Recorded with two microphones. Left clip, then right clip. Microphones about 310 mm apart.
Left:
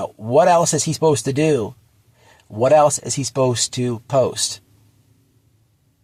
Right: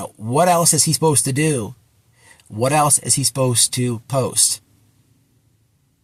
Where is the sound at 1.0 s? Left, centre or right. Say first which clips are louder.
Left 4 dB; centre.